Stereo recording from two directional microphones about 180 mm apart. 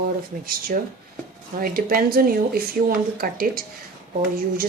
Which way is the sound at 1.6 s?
55° right (ahead or behind).